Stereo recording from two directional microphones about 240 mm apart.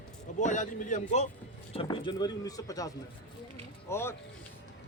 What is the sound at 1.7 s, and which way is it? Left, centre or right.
Speech, centre.